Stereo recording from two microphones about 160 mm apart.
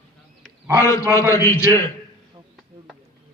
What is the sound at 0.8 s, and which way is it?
A man's voice, 20° left (ahead or behind).